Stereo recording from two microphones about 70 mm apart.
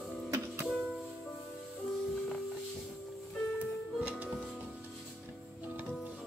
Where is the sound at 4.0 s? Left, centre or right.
Right.